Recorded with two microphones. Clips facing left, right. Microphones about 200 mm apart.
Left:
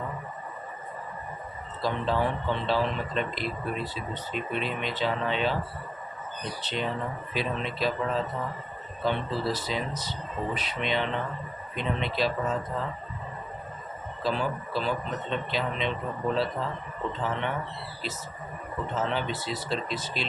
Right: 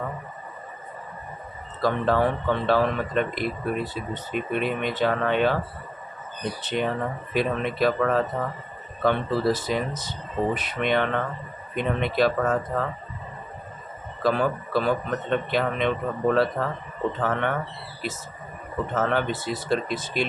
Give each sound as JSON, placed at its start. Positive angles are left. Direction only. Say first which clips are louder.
{"t": 1.8, "sound": "a man's voice", "louder": "right 5 dB", "side_deg": -55}
{"t": 14.2, "sound": "a man's voice", "louder": "right 6 dB", "side_deg": -55}
{"t": 18.9, "sound": "speech", "louder": "right 5 dB", "side_deg": -55}